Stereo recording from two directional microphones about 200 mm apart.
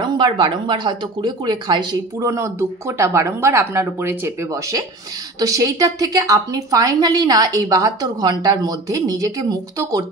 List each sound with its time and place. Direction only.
0.0 s a woman's voice: 20° right (ahead or behind)